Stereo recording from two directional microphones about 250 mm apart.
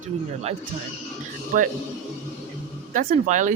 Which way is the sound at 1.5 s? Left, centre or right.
Right.